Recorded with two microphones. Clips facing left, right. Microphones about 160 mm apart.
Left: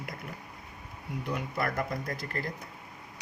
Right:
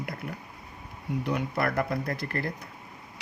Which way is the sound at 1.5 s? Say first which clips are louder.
Right 3 dB; 60° right (ahead or behind).